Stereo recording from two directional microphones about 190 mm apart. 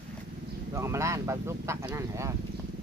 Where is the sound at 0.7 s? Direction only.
15° right (ahead or behind).